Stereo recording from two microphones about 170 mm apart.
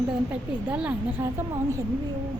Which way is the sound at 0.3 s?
10° right (ahead or behind).